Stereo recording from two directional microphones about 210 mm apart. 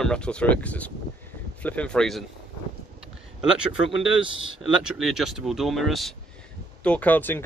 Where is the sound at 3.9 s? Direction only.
65° left (ahead or behind).